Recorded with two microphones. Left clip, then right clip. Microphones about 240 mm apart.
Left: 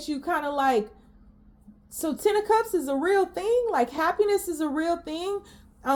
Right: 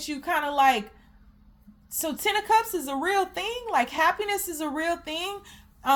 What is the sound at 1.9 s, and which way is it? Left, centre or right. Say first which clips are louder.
Speech: left 2 dB; right.